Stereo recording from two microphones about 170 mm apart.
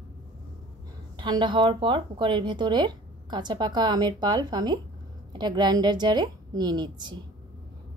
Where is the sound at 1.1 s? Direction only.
25° right (ahead or behind).